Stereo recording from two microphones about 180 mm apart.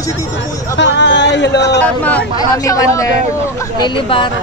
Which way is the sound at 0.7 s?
85° left.